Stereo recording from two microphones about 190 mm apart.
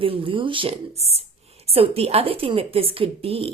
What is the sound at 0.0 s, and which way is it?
A woman's voice, 30° right (ahead or behind).